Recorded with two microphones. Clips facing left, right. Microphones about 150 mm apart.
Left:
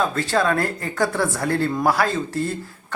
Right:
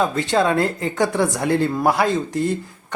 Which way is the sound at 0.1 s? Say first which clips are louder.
Right 2 dB; 20° right (ahead or behind).